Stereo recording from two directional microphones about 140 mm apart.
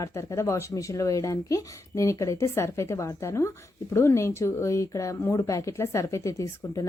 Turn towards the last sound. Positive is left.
turn(degrees=20)  # may be behind; listen again after turning